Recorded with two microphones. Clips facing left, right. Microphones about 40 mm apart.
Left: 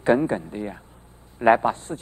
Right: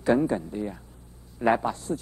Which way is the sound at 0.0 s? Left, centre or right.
Left.